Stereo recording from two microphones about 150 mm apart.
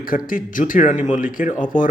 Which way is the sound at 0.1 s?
65° left (ahead or behind).